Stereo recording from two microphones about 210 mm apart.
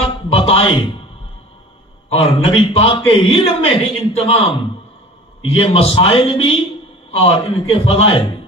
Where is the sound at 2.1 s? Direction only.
25° left (ahead or behind).